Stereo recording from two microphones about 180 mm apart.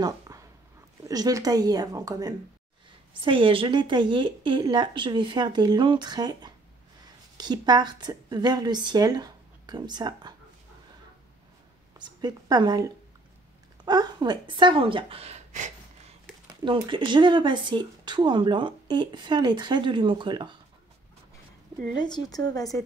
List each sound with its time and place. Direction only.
0.0 s a sound: 20° right (ahead or behind)
1.0 s a woman's voice: 20° right (ahead or behind)
12.0 s a woman's voice: 25° right (ahead or behind); by 15.7 s 40° right (ahead or behind)
16.6 s speech: 25° right (ahead or behind)
21.9 s speech: 25° left (ahead or behind)